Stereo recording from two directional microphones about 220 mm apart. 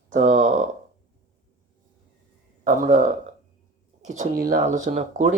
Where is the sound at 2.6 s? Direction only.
35° right (ahead or behind).